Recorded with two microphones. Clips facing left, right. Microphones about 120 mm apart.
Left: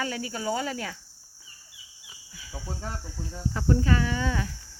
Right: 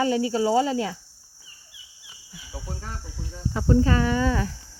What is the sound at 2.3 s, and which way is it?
Cricket, 20° right (ahead or behind).